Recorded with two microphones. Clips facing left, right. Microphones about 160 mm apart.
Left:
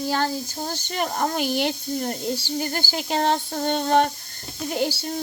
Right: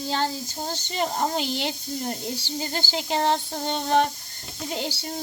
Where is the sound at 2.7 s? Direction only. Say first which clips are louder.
Left 1 dB; 20° right (ahead or behind).